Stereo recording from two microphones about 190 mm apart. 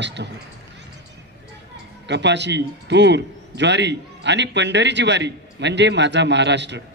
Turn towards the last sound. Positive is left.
turn(degrees=-65)  # may be behind; listen again after turning